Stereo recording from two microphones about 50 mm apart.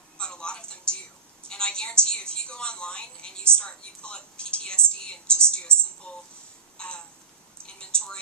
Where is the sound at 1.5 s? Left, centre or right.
Centre.